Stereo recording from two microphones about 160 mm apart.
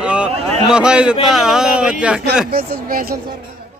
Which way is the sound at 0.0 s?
5° right (ahead or behind).